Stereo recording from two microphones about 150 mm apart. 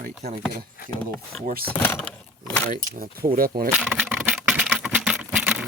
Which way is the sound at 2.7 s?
70° right (ahead or behind).